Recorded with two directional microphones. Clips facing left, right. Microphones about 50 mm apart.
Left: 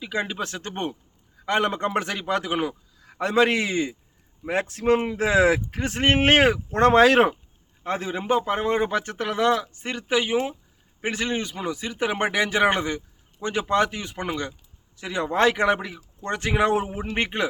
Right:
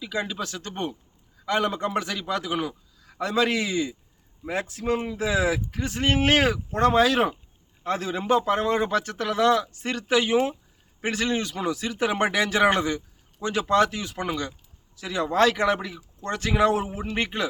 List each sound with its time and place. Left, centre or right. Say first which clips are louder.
0.0 s speech: left 2 dB; left
7.9 s a man's voice: right 1 dB; left